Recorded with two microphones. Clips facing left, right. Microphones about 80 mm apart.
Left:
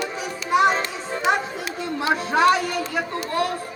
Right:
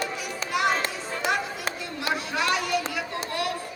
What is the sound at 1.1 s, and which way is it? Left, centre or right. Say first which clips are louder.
Chatter: left 6 dB; left.